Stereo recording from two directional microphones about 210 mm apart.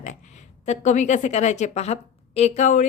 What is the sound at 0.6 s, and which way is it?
A woman's voice, 35° left (ahead or behind).